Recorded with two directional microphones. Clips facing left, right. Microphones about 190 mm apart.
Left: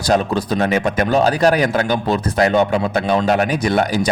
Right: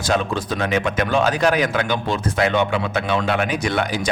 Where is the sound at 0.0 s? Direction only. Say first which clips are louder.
Left 4 dB; 40° left (ahead or behind).